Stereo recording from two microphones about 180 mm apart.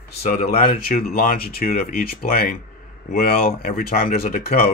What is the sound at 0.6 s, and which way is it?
Speech, 50° left (ahead or behind).